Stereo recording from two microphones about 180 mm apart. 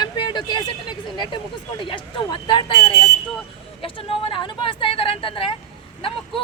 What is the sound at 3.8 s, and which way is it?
Speech, 30° left (ahead or behind).